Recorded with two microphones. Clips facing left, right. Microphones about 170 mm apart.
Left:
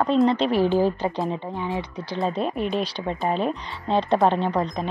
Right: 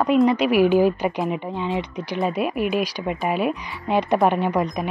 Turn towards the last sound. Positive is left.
turn(degrees=-15)  # may be behind; listen again after turning